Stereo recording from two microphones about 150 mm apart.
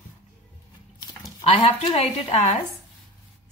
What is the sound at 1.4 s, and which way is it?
A woman's voice, 40° left (ahead or behind).